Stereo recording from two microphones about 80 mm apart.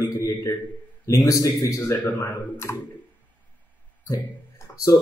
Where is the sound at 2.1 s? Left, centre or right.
Left.